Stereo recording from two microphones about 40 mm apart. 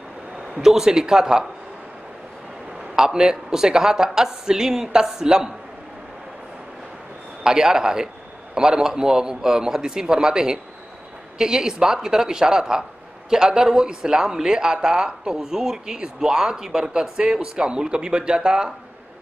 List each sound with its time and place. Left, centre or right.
0.6 s speech: centre
3.0 s speech: centre
7.4 s speech: centre
17.2 s speech: right